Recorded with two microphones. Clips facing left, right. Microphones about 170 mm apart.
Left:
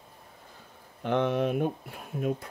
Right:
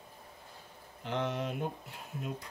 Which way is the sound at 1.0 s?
60° left (ahead or behind).